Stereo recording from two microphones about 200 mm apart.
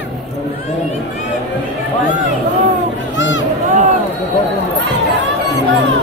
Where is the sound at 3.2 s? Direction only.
65° left (ahead or behind).